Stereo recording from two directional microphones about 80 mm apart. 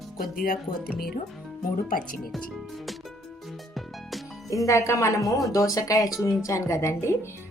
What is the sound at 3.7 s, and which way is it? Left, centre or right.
Music, centre.